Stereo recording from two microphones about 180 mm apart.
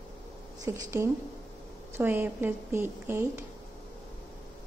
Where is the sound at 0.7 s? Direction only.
15° right (ahead or behind).